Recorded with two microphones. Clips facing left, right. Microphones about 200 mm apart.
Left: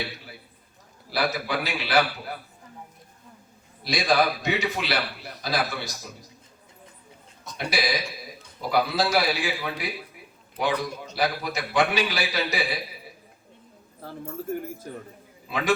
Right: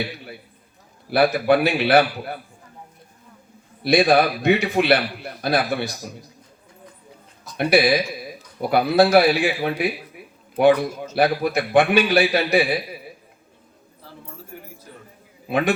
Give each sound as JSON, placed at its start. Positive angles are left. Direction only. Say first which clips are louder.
{"t": 1.1, "sound": "a man's voice", "louder": "right 10 dB", "side_deg": -60}
{"t": 3.8, "sound": "a man's voice", "louder": "right 7 dB", "side_deg": -60}
{"t": 7.5, "sound": "a man's voice", "louder": "right 10 dB", "side_deg": -60}
{"t": 14.0, "sound": "a sound", "louder": "left 6 dB", "side_deg": 50}
{"t": 15.4, "sound": "a man's voice", "louder": "right 7 dB", "side_deg": -60}